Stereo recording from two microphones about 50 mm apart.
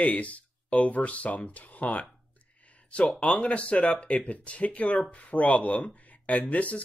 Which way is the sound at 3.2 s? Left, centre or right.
Left.